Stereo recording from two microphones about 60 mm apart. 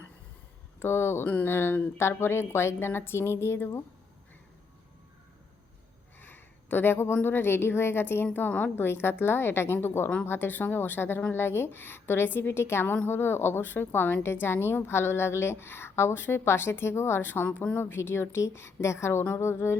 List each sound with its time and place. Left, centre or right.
0.8 s a woman's voice: left
6.1 s a sound: left
7.2 s a woman's voice: left
8.8 s a woman's voice: left